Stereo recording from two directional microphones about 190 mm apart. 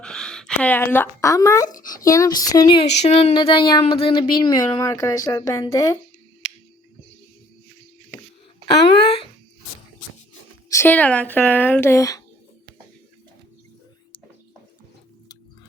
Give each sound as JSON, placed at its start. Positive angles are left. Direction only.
{"t": 0.0, "sound": "a woman's voice", "side_deg": 5}
{"t": 2.8, "sound": "speech", "side_deg": 35}
{"t": 8.6, "sound": "speech", "side_deg": 30}
{"t": 10.7, "sound": "a woman's voice", "side_deg": 10}